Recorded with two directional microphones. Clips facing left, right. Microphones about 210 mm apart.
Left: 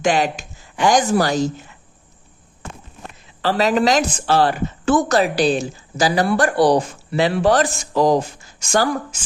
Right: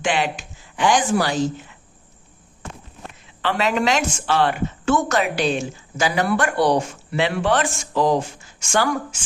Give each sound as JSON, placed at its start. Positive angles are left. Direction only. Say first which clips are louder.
{"t": 0.0, "sound": "speech", "louder": "left 4 dB", "side_deg": 40}
{"t": 3.4, "sound": "a woman's voice", "louder": "left 4 dB", "side_deg": 35}